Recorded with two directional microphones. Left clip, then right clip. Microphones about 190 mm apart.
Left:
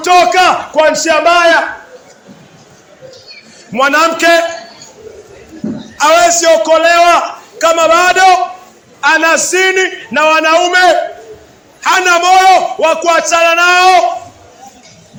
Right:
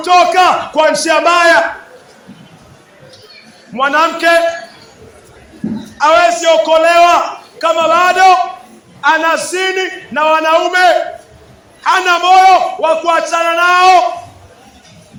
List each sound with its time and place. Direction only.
0.0 s a man's voice: 20° left (ahead or behind)
0.7 s speech: 5° right (ahead or behind)
3.8 s a man's voice: 30° left (ahead or behind)
6.0 s a man's voice: 35° left (ahead or behind)
6.6 s a man's voice: 15° left (ahead or behind)
7.6 s a man's voice: 30° left (ahead or behind)